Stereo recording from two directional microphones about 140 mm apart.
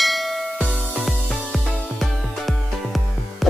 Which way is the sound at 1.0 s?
Centre (ahead or behind).